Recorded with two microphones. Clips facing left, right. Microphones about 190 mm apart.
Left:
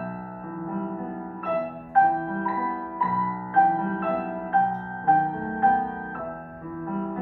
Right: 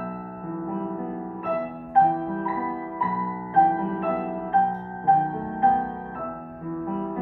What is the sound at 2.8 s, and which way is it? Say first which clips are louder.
Music: even; 15° right (ahead or behind).